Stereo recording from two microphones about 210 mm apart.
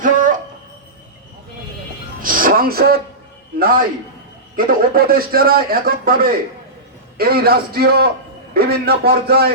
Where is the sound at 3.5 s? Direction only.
45° right (ahead or behind).